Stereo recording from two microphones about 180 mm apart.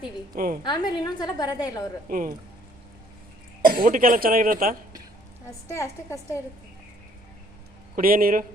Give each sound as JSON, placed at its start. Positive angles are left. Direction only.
{"t": 0.3, "sound": "speech", "side_deg": -50}
{"t": 0.6, "sound": "a woman's voice", "side_deg": 25}
{"t": 2.0, "sound": "speech", "side_deg": -50}
{"t": 3.6, "sound": "speech", "side_deg": -50}
{"t": 5.5, "sound": "a woman's voice", "side_deg": 15}
{"t": 7.9, "sound": "speech", "side_deg": -55}